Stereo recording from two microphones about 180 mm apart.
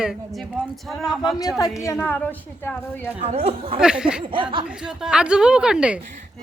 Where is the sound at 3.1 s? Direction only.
35° right (ahead or behind).